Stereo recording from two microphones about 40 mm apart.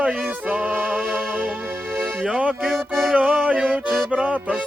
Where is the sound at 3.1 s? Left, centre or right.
Right.